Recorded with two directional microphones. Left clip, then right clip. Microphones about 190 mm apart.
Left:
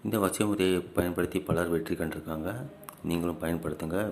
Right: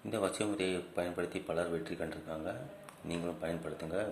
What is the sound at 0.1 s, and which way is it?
Speech, 25° left (ahead or behind).